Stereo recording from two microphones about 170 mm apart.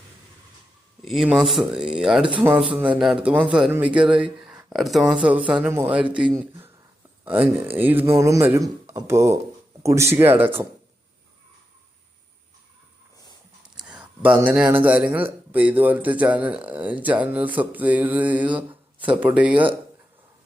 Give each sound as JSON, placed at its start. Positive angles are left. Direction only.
{"t": 1.0, "sound": "speech", "side_deg": 0}
{"t": 13.8, "sound": "a sound", "side_deg": -5}
{"t": 14.8, "sound": "speech", "side_deg": -10}